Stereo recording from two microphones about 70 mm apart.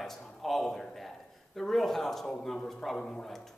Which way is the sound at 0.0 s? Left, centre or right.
Centre.